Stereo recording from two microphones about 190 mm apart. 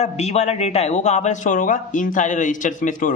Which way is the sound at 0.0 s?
35° left (ahead or behind).